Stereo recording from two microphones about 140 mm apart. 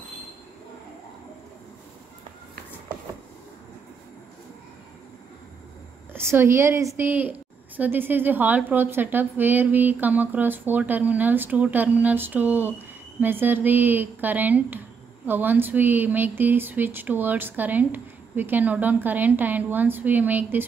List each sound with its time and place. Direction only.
6.1 s a woman's voice: 20° right (ahead or behind)